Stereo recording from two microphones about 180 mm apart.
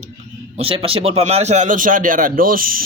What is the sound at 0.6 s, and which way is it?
Speech, 30° right (ahead or behind).